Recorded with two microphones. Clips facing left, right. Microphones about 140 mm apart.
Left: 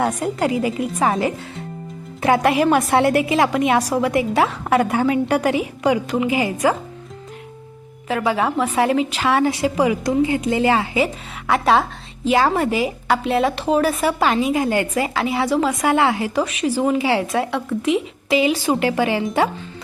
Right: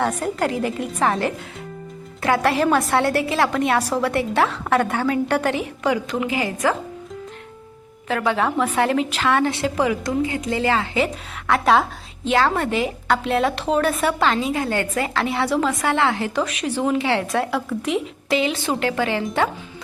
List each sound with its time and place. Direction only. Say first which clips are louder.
0.0 s a woman's voice: left 2 dB; 10° left (ahead or behind)
2.2 s a woman's voice: left 3 dB; 20° left (ahead or behind)
8.0 s a woman's voice: left 1 dB; 5° left (ahead or behind)
11.0 s a woman's voice: left 2 dB; 5° left (ahead or behind)
15.8 s a woman's voice: left 3 dB; 15° left (ahead or behind)